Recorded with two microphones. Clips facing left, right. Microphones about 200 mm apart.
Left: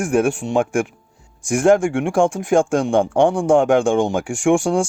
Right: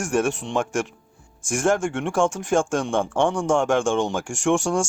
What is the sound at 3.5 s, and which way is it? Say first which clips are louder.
Speech: left 6 dB; 60° left (ahead or behind).